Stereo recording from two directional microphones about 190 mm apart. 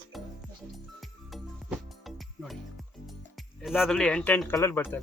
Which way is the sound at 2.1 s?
Centre (ahead or behind).